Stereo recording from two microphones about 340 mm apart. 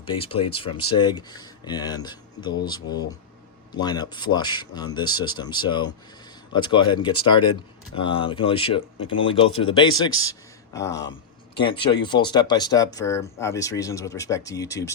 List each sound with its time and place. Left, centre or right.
0.0 s speech: centre